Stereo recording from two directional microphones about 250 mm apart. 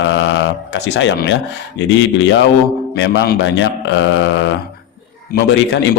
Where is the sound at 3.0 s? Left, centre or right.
Left.